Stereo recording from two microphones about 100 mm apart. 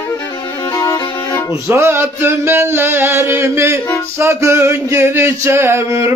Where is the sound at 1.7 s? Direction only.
25° right (ahead or behind).